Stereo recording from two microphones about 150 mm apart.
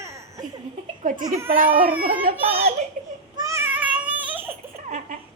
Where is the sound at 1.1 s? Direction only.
60° right (ahead or behind).